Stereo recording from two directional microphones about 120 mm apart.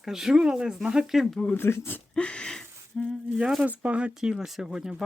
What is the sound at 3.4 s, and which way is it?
Speech, 10° right (ahead or behind).